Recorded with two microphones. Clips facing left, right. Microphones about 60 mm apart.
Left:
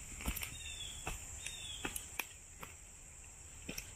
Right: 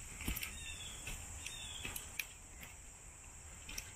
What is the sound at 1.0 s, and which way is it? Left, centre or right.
Cricket, left.